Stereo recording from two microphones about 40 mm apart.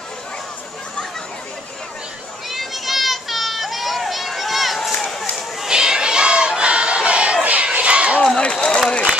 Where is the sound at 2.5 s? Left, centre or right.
Centre.